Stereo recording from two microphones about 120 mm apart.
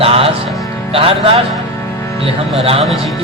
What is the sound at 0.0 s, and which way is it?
Music, 55° right (ahead or behind).